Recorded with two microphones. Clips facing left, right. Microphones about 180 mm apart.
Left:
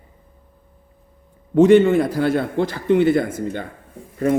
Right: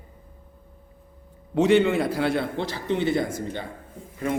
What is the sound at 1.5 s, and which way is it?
A man's voice, 50° left (ahead or behind).